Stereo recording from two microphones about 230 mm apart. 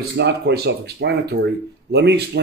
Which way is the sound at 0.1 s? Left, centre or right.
Right.